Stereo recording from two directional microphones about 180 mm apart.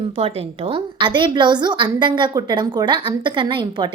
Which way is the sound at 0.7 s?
25° right (ahead or behind).